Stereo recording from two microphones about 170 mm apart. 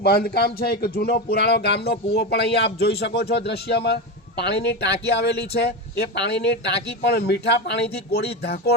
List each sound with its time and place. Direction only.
0.0 s speech: 65° left (ahead or behind)